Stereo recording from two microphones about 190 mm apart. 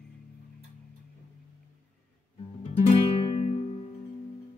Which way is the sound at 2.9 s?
30° left (ahead or behind).